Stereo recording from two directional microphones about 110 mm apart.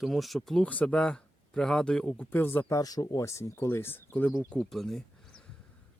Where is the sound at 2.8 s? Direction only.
35° left (ahead or behind); by 4.3 s 15° left (ahead or behind).